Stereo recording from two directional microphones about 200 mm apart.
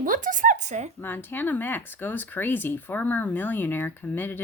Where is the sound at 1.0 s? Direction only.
10° left (ahead or behind).